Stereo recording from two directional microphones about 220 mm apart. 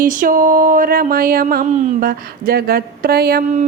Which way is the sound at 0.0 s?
40° right (ahead or behind).